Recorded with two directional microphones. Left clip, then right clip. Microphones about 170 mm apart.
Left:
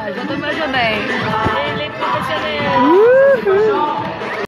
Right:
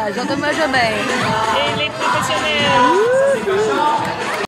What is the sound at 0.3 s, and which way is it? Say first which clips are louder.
Speech: right 2 dB; 25° right (ahead or behind).